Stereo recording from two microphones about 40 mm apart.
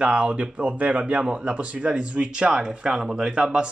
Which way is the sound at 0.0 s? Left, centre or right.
Right.